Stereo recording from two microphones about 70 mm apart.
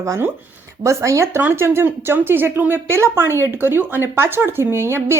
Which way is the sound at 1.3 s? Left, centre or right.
Right.